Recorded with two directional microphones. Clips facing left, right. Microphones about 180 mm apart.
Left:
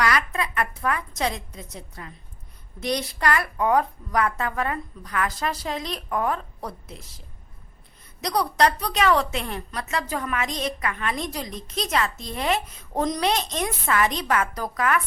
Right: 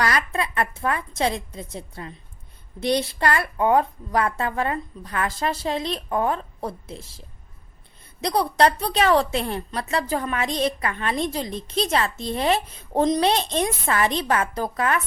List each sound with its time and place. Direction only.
0.0 s a woman's voice: 35° right (ahead or behind)
8.2 s a woman's voice: 30° right (ahead or behind)